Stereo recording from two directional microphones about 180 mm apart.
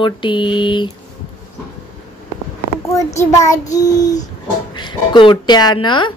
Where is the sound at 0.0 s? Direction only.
25° left (ahead or behind).